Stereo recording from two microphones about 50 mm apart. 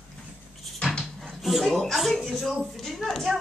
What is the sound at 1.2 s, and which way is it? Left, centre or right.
A man's voice, centre.